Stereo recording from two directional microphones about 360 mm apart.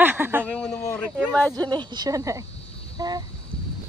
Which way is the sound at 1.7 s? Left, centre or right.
Centre.